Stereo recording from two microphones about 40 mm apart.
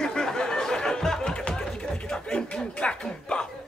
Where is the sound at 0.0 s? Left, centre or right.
Centre.